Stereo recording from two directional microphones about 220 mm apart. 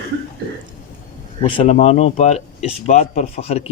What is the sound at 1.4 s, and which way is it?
Speech, 25° left (ahead or behind).